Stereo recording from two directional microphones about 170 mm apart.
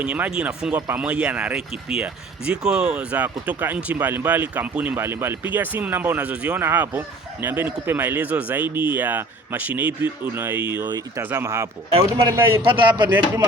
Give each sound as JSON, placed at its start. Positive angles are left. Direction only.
{"t": 0.0, "sound": "speech", "side_deg": -10}
{"t": 10.8, "sound": "speech", "side_deg": -20}
{"t": 11.9, "sound": "speech", "side_deg": -30}
{"t": 12.3, "sound": "speech", "side_deg": -15}
{"t": 12.6, "sound": "speech", "side_deg": -30}